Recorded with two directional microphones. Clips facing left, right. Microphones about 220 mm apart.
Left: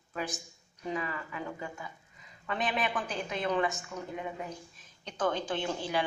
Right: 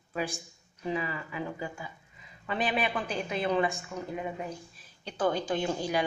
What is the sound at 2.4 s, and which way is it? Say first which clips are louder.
Speech: right 2 dB; 10° right (ahead or behind).